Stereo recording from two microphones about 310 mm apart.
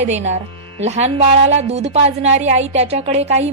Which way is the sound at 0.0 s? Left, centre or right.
Right.